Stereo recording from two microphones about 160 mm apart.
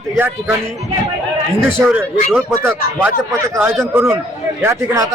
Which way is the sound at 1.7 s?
10° right (ahead or behind).